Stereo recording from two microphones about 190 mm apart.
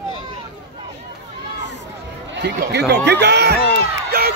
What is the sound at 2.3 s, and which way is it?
Speech, 60° right (ahead or behind).